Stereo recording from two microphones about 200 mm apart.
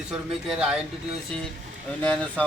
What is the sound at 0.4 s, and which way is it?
Speech, 5° right (ahead or behind).